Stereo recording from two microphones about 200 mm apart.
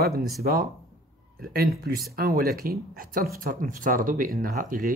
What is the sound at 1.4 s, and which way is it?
Speech, 50° right (ahead or behind).